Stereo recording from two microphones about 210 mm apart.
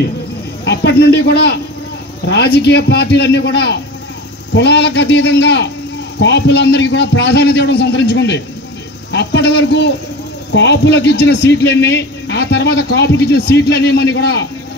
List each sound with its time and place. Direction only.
0.7 s a man's voice: 55° left (ahead or behind)